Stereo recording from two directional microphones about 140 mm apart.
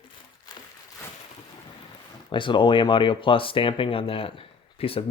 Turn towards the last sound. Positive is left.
turn(degrees=40)  # may be behind; listen again after turning